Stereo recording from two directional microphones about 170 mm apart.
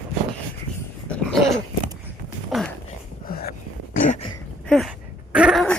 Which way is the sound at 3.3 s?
60° left (ahead or behind).